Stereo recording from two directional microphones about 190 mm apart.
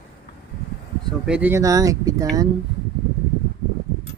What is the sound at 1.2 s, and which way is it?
Speech, 5° right (ahead or behind).